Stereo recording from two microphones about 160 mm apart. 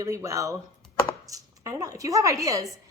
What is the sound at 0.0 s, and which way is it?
A woman's voice, 20° right (ahead or behind).